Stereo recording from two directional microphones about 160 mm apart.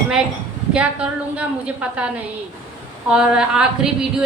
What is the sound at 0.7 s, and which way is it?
A woman's voice, 5° right (ahead or behind).